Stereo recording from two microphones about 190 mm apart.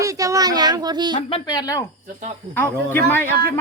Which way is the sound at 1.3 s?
20° left (ahead or behind).